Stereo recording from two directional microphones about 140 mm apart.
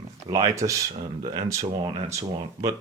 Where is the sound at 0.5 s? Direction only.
25° right (ahead or behind).